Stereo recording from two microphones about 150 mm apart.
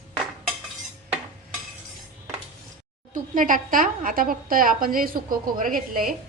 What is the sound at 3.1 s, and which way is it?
A woman's voice, 60° right (ahead or behind).